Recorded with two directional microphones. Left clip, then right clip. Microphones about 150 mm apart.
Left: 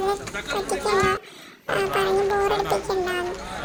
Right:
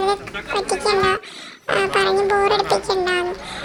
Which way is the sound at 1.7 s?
20° right (ahead or behind).